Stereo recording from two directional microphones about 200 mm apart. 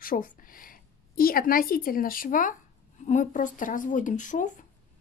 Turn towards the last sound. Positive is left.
turn(degrees=40)  # may be behind; listen again after turning